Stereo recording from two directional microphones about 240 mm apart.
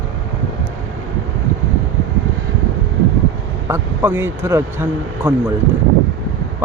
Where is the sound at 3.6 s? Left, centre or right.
Centre.